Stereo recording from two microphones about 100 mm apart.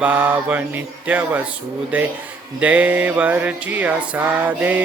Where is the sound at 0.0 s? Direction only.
15° right (ahead or behind).